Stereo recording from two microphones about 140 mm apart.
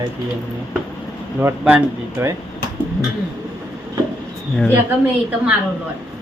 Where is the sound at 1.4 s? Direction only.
15° right (ahead or behind).